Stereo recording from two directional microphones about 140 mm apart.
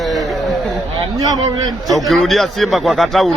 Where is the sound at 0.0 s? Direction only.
Centre (ahead or behind).